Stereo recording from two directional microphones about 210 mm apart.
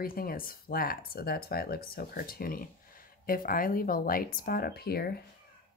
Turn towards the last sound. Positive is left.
turn(degrees=50)  # may be behind; listen again after turning